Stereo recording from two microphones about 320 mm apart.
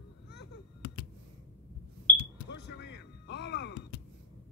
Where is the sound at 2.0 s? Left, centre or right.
Left.